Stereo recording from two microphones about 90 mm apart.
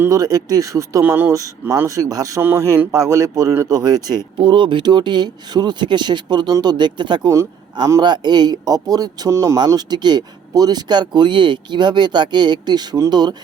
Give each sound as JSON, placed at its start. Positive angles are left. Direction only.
{"t": 0.1, "sound": "speech", "side_deg": -45}
{"t": 1.0, "sound": "speech", "side_deg": -25}
{"t": 2.4, "sound": "speech", "side_deg": -30}
{"t": 4.4, "sound": "a man's voice", "side_deg": -65}
{"t": 9.6, "sound": "a man's voice", "side_deg": -50}